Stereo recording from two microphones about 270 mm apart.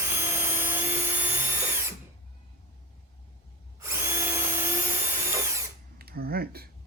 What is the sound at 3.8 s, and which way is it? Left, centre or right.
Drill, centre.